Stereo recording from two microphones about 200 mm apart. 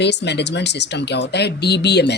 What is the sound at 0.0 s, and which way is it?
Speech, 60° left (ahead or behind).